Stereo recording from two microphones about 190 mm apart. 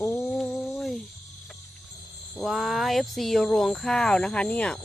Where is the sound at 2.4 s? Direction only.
Centre (ahead or behind).